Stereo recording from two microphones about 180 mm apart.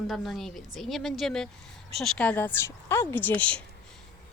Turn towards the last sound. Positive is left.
turn(degrees=10)  # may be behind; listen again after turning